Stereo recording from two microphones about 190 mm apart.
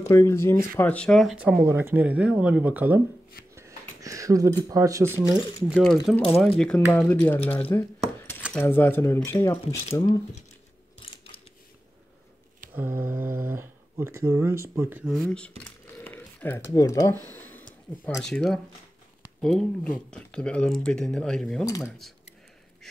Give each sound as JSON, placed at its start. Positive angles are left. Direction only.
{"t": 0.1, "sound": "speech", "side_deg": 15}
{"t": 3.5, "sound": "a sound", "side_deg": -15}
{"t": 4.6, "sound": "speech", "side_deg": -15}
{"t": 5.6, "sound": "speech", "side_deg": 0}
{"t": 12.7, "sound": "speech", "side_deg": -10}
{"t": 15.1, "sound": "speech", "side_deg": 5}
{"t": 17.4, "sound": "a sound", "side_deg": 10}
{"t": 18.0, "sound": "speech", "side_deg": 5}